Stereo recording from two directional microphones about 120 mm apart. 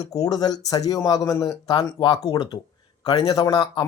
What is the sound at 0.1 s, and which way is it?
A man's voice, 30° left (ahead or behind).